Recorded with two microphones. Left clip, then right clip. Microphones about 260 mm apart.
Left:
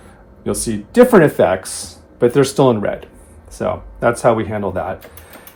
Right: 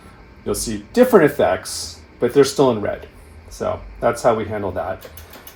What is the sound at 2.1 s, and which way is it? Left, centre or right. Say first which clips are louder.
Speech: left 2 dB; left.